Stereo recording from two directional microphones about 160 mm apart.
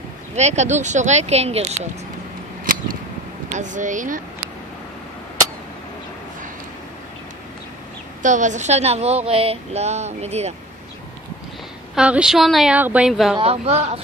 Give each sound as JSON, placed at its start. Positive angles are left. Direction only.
{"t": 0.4, "sound": "a woman's voice", "side_deg": -45}
{"t": 2.6, "sound": "a sound", "side_deg": -60}
{"t": 3.5, "sound": "a woman's voice", "side_deg": -50}
{"t": 8.2, "sound": "a woman's voice", "side_deg": -50}
{"t": 11.9, "sound": "a woman's voice", "side_deg": -5}
{"t": 13.4, "sound": "speech", "side_deg": -40}